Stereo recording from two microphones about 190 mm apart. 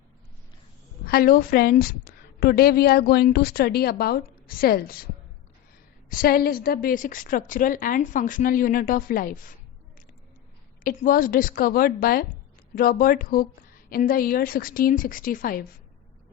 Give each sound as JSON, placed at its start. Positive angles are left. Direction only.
{"t": 1.0, "sound": "a woman's voice", "side_deg": 50}
{"t": 6.1, "sound": "a woman's voice", "side_deg": 50}
{"t": 10.8, "sound": "a woman's voice", "side_deg": 45}